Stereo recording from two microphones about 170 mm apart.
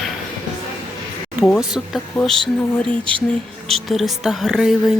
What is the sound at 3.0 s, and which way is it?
Music, 30° right (ahead or behind).